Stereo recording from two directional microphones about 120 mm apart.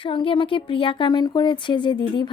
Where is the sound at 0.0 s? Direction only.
45° left (ahead or behind).